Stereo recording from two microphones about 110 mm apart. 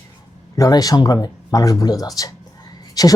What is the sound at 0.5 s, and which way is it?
Speech, 35° left (ahead or behind).